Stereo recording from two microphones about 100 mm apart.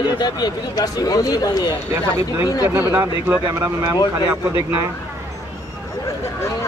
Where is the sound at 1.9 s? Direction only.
30° right (ahead or behind).